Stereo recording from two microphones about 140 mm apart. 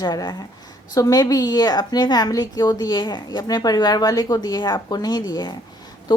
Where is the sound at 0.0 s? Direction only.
30° left (ahead or behind).